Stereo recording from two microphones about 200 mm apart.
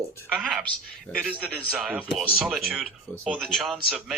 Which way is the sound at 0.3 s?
Centre (ahead or behind).